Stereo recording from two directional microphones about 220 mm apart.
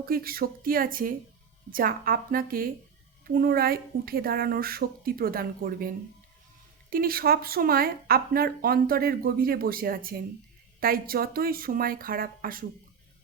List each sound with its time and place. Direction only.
0.0 s speech: 40° right (ahead or behind)
6.9 s speech: 40° right (ahead or behind)